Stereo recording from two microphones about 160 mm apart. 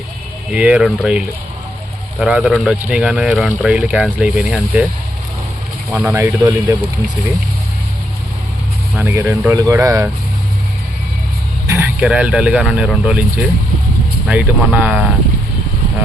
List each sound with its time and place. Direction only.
0.5 s speech: 5° right (ahead or behind)
5.9 s speech: centre (ahead or behind)
6.1 s a man's voice: 20° right (ahead or behind)
9.0 s speech: 15° right (ahead or behind)
11.6 s speech: 15° right (ahead or behind)
14.3 s speech: 10° right (ahead or behind)